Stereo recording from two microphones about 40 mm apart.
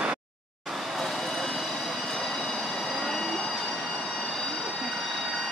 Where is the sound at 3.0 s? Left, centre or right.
Centre.